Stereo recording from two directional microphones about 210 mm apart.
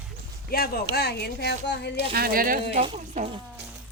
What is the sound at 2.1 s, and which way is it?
Speech, 45° right (ahead or behind).